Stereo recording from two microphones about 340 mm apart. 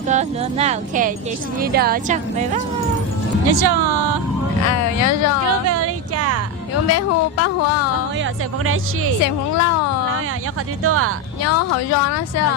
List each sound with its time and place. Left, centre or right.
0.1 s speech: centre
3.4 s speech: right
4.7 s speech: left
5.6 s a sound: right
6.8 s speech: left
8.2 s speech: right
9.2 s speech: left
10.8 s speech: right
11.4 s speech: left